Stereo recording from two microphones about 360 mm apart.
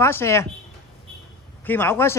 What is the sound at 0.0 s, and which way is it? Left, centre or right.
Speech, centre.